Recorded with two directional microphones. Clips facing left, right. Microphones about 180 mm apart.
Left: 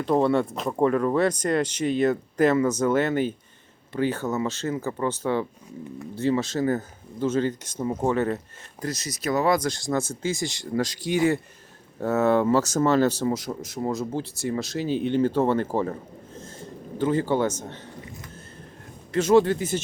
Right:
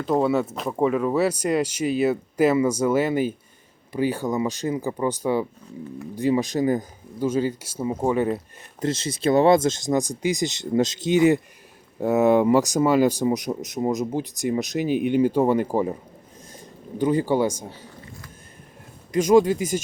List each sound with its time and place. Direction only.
0.0 s speech: 5° right (ahead or behind)
8.8 s speech: 25° right (ahead or behind); by 17.7 s 10° right (ahead or behind)
19.1 s speech: 15° right (ahead or behind)